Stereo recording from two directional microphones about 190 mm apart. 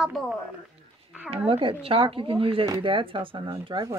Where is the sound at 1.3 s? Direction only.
30° right (ahead or behind).